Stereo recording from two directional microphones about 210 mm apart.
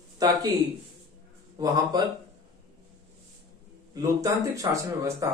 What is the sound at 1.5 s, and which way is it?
Speech, 20° right (ahead or behind).